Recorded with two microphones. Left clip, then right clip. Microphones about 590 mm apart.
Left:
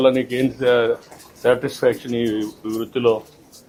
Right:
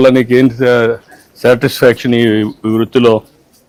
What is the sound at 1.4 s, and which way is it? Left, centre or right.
Speech, right.